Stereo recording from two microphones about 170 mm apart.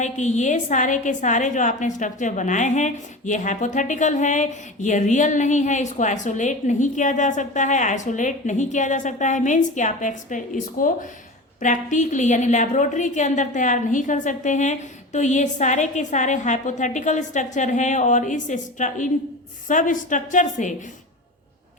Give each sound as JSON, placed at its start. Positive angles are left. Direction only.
{"t": 0.0, "sound": "a woman's voice", "side_deg": 45}